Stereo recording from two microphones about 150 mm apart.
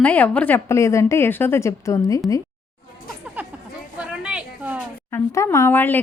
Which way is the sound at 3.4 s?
10° right (ahead or behind).